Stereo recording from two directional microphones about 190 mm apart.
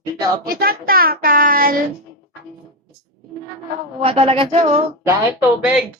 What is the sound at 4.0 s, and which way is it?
Speech, 30° right (ahead or behind).